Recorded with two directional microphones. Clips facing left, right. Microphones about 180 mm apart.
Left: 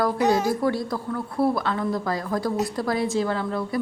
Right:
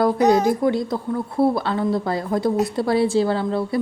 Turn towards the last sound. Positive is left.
turn(degrees=-30)  # may be behind; listen again after turning